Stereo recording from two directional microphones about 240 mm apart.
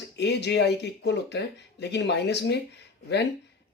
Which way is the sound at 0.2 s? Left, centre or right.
Left.